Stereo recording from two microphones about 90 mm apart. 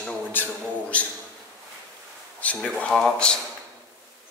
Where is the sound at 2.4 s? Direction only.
15° left (ahead or behind).